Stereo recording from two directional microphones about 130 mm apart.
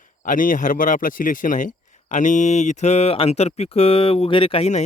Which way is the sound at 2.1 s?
75° left (ahead or behind).